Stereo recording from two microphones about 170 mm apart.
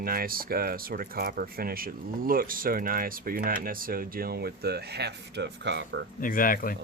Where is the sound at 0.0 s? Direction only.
60° right (ahead or behind); by 6.0 s 90° right.